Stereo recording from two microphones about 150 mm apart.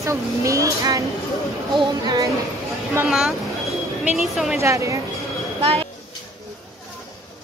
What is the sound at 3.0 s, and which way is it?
Speech, centre (ahead or behind).